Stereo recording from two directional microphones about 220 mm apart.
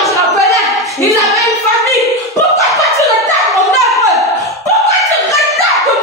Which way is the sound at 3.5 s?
Centre (ahead or behind).